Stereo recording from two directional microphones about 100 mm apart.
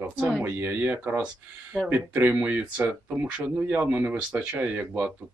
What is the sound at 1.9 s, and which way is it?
Speech, 20° right (ahead or behind).